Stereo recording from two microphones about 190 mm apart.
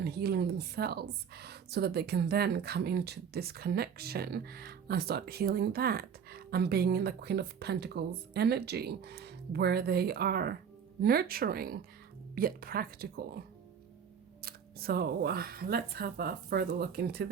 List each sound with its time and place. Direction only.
0.0 s speech: 60° right (ahead or behind)
14.4 s speech: 55° right (ahead or behind)